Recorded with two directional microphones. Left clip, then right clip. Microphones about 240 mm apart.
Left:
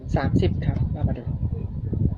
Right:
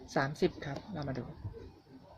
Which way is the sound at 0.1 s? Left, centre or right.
Centre.